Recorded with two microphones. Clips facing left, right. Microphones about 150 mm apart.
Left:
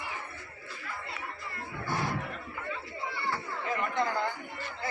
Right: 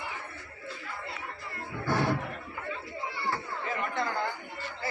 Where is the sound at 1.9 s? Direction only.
75° right (ahead or behind).